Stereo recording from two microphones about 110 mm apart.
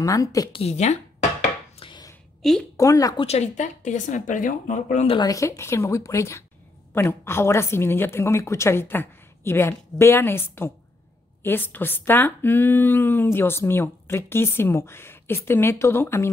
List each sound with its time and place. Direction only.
0.0 s a woman's voice: 30° left (ahead or behind)
0.5 s speech: 65° left (ahead or behind)
1.8 s a sound: 55° left (ahead or behind)
2.4 s a woman's voice: centre (ahead or behind)
2.8 s a woman's voice: 30° left (ahead or behind)
3.2 s a woman's voice: 75° left (ahead or behind); by 5.1 s 90° left
5.2 s speech: 30° left (ahead or behind)